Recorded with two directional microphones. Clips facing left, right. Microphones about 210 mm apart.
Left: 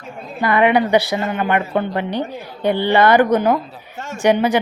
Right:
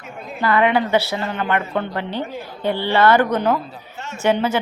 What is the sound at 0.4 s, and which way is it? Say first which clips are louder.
A woman's voice: left 2 dB; 15° left (ahead or behind).